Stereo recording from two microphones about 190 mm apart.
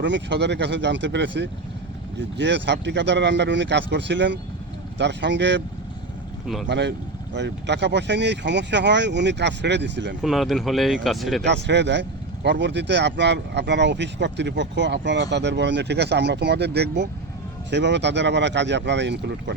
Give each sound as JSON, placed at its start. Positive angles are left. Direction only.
{"t": 0.0, "sound": "a man's voice", "side_deg": -70}
{"t": 6.7, "sound": "speech", "side_deg": -65}
{"t": 10.2, "sound": "speech", "side_deg": 0}
{"t": 11.4, "sound": "a man's voice", "side_deg": -65}